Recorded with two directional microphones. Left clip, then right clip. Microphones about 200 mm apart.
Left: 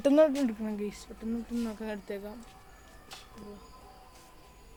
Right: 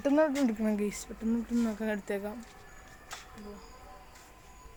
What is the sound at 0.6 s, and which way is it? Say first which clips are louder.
Speech: right 5 dB; 45° right (ahead or behind).